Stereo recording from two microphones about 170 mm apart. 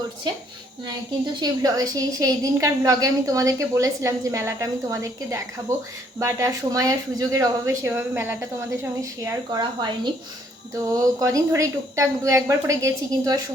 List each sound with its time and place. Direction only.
1.4 s a woman's voice: 20° right (ahead or behind)